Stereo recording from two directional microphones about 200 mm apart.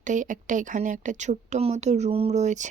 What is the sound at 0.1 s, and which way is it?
A woman's voice, 40° right (ahead or behind).